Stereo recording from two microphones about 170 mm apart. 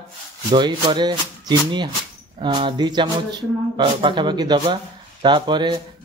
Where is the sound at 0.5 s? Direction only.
25° right (ahead or behind).